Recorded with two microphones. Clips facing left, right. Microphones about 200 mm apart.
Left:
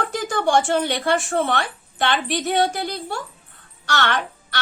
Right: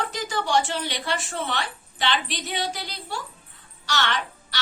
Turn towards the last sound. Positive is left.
turn(degrees=55)  # may be behind; listen again after turning